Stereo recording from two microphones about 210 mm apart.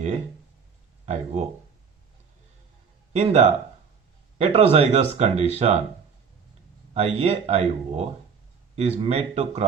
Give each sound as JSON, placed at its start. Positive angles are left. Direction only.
{"t": 1.0, "sound": "speech", "side_deg": -35}
{"t": 3.1, "sound": "speech", "side_deg": -30}
{"t": 6.9, "sound": "speech", "side_deg": -30}